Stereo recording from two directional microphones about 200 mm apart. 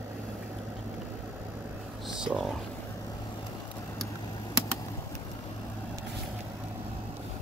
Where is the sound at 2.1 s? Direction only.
5° right (ahead or behind).